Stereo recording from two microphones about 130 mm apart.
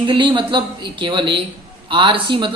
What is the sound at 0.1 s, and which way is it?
Speech, 40° right (ahead or behind).